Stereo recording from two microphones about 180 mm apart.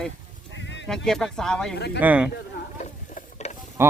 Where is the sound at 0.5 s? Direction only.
80° left.